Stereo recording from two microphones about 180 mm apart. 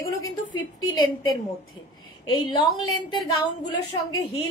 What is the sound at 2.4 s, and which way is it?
A woman's voice, 20° left (ahead or behind).